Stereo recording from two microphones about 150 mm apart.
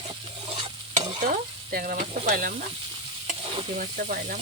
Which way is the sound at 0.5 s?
40° right (ahead or behind).